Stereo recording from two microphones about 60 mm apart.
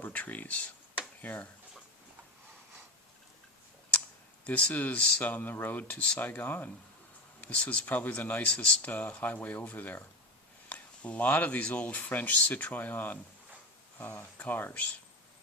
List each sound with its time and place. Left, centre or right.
0.0 s speech: left
4.4 s speech: left